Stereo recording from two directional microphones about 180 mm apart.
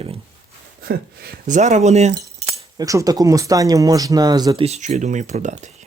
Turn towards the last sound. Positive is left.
turn(degrees=-40)  # may be behind; listen again after turning